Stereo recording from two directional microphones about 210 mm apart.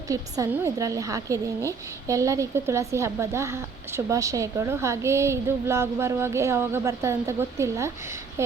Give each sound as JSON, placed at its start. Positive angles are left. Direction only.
{"t": 0.1, "sound": "speech", "side_deg": -15}